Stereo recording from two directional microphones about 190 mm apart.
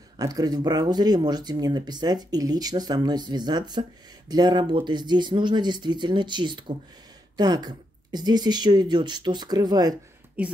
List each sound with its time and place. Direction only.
0.2 s speech: 20° right (ahead or behind)
10.4 s a woman's voice: 10° right (ahead or behind)